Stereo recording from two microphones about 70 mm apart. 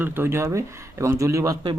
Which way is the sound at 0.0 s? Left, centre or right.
Right.